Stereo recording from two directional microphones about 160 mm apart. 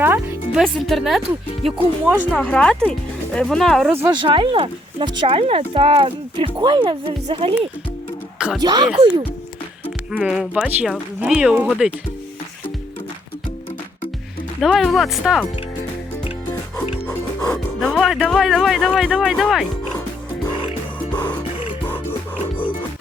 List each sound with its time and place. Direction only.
0.0 s music: 10° right (ahead or behind)
0.6 s speech: centre (ahead or behind)
2.4 s speech: 5° left (ahead or behind)
4.1 s speech: 30° right (ahead or behind)
8.6 s speech: 25° right (ahead or behind)
10.1 s speech: 5° right (ahead or behind)
14.6 s speech: centre (ahead or behind)
17.5 s speech: 5° left (ahead or behind)
21.1 s music: 10° left (ahead or behind)